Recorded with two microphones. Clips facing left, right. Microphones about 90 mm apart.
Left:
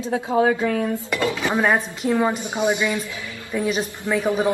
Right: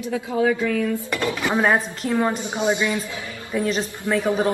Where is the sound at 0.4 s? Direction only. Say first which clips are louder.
Left 1 dB; 40° left (ahead or behind).